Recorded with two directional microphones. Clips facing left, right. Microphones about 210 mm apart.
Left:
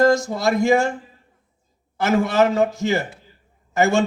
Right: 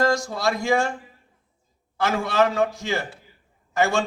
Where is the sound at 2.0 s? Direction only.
20° left (ahead or behind).